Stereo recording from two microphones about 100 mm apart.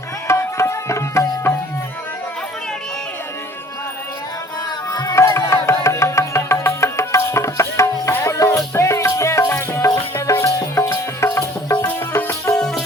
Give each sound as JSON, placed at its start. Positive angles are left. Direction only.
{"t": 0.3, "sound": "music", "side_deg": 25}
{"t": 4.9, "sound": "music", "side_deg": 40}
{"t": 12.5, "sound": "music", "side_deg": 5}